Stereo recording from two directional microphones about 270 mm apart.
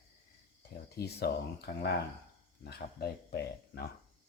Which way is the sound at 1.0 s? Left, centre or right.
Left.